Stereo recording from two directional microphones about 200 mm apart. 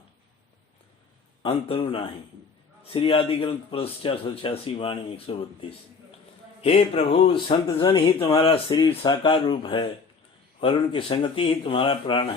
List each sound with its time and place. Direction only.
1.4 s speech: 30° left (ahead or behind)